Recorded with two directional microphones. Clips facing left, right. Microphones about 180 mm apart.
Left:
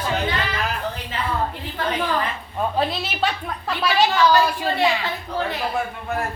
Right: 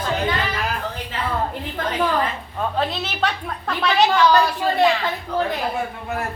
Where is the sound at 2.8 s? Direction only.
5° left (ahead or behind).